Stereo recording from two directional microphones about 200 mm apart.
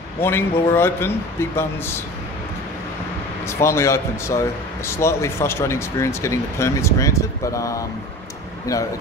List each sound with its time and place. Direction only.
0.2 s speech: 10° left (ahead or behind)
3.4 s speech: 15° left (ahead or behind)